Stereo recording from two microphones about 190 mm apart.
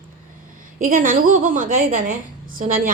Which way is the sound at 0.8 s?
45° right (ahead or behind).